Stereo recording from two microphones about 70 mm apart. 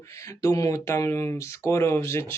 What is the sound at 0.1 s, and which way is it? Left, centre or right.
Speech, left.